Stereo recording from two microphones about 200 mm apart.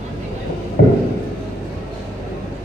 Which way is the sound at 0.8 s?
45° left (ahead or behind).